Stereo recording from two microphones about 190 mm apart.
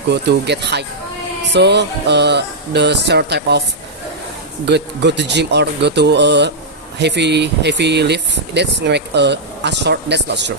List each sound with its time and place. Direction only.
0.1 s speech: 65° right (ahead or behind)
4.6 s speech: 65° right (ahead or behind)